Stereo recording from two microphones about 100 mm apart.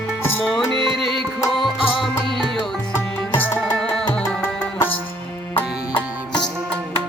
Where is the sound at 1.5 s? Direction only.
55° left (ahead or behind).